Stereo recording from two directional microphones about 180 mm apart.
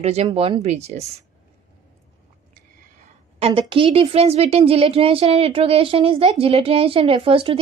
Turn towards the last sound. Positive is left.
turn(degrees=-30)  # may be behind; listen again after turning